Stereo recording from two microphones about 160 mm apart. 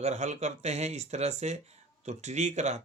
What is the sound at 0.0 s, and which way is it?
Speech, 45° right (ahead or behind).